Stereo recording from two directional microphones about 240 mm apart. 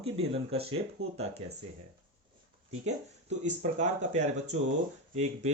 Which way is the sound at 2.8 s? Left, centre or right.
Right.